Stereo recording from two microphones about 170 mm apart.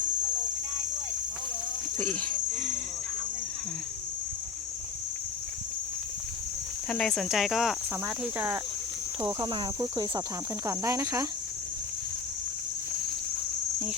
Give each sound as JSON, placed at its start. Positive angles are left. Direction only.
{"t": 2.0, "sound": "cricket", "side_deg": 10}
{"t": 6.8, "sound": "speech", "side_deg": 5}
{"t": 8.2, "sound": "cricket", "side_deg": -10}
{"t": 9.2, "sound": "speech", "side_deg": -25}
{"t": 10.7, "sound": "cricket", "side_deg": -20}